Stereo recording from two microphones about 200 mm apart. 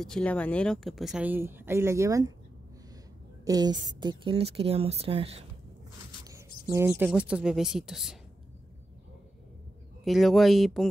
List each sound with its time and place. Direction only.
0.0 s speech: 5° left (ahead or behind); by 2.3 s 15° right (ahead or behind)
3.4 s a woman's voice: 20° right (ahead or behind)
6.2 s a sound: 15° right (ahead or behind)
6.9 s speech: 5° right (ahead or behind)
10.0 s speech: centre (ahead or behind)